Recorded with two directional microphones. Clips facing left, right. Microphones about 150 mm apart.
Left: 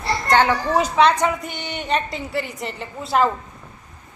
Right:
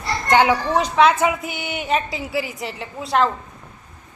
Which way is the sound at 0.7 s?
Centre (ahead or behind).